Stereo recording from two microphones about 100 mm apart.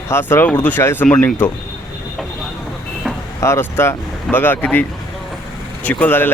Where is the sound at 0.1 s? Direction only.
25° left (ahead or behind).